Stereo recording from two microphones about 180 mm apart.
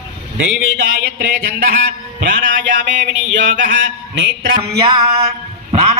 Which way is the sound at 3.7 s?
90° right.